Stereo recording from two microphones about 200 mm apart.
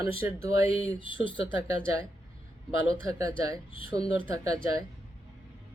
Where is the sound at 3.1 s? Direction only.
15° right (ahead or behind).